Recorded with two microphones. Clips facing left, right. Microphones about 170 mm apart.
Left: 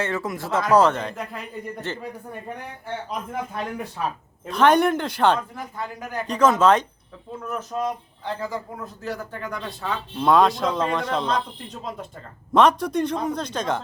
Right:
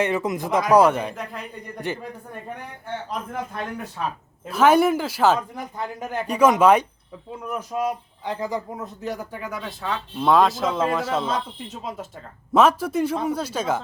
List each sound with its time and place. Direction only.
0.0 s a man's voice: 20° right (ahead or behind)
1.1 s a man's voice: centre (ahead or behind)
1.9 s a man's voice: 15° right (ahead or behind)
4.4 s a man's voice: 5° right (ahead or behind)
5.5 s a man's voice: 20° right (ahead or behind)
6.2 s a man's voice: 10° right (ahead or behind)